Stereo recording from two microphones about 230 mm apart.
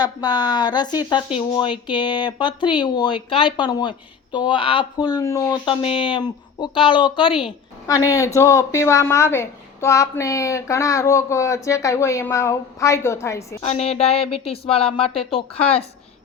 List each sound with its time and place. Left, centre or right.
0.0 s speech: centre
13.6 s speech: left